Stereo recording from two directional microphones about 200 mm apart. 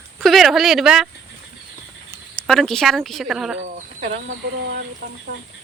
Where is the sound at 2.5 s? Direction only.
Centre (ahead or behind).